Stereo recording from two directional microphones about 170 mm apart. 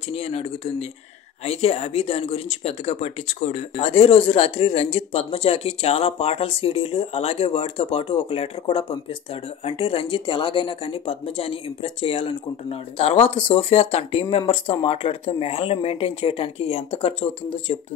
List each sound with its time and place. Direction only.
0.1 s speech: 35° left (ahead or behind)